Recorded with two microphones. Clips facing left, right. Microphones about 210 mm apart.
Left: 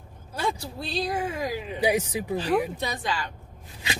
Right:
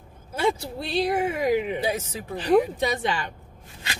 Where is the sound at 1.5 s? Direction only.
65° right (ahead or behind).